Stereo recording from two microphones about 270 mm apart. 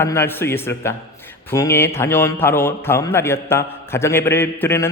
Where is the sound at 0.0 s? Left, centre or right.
Centre.